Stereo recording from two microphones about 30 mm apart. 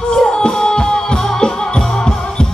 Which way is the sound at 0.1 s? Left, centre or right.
Left.